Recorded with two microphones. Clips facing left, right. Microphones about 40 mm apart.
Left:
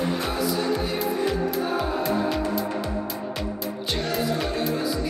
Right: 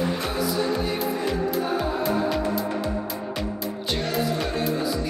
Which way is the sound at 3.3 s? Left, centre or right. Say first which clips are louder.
Right 1 dB; centre.